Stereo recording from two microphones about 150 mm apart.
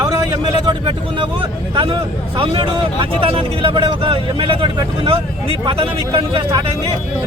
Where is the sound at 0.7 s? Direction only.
35° right (ahead or behind).